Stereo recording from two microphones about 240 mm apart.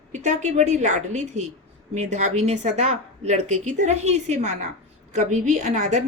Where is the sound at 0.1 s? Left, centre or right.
Right.